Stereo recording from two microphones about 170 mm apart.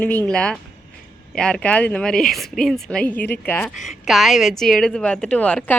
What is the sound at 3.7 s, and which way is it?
A woman's voice, centre (ahead or behind).